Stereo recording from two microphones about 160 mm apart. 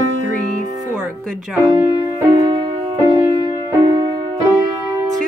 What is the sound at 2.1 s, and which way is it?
Music, 30° right (ahead or behind).